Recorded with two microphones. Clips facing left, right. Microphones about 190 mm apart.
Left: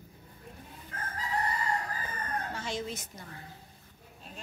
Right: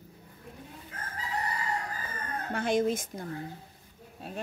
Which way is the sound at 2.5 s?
55° right (ahead or behind).